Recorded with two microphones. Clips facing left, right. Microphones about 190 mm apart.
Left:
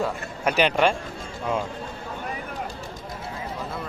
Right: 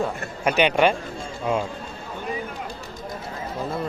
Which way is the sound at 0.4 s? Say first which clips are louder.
Right 2 dB; centre (ahead or behind).